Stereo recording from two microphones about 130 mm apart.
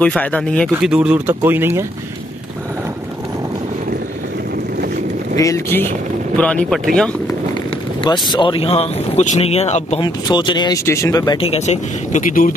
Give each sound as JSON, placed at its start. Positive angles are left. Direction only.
{"t": 0.0, "sound": "speech", "side_deg": 10}
{"t": 0.7, "sound": "speech", "side_deg": -10}
{"t": 5.4, "sound": "speech", "side_deg": 20}
{"t": 6.3, "sound": "speech", "side_deg": 10}
{"t": 8.0, "sound": "speech", "side_deg": 35}
{"t": 9.9, "sound": "speech", "side_deg": 35}
{"t": 10.9, "sound": "speech", "side_deg": 25}
{"t": 11.4, "sound": "a man's voice", "side_deg": 55}